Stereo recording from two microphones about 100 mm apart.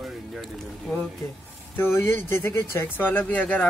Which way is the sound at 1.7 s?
25° left (ahead or behind).